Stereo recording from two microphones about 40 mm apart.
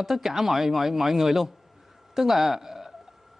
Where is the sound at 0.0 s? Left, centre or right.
Centre.